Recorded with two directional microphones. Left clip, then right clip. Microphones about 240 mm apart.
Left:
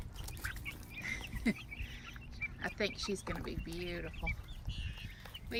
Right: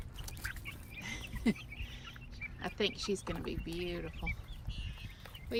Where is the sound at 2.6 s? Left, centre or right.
Centre.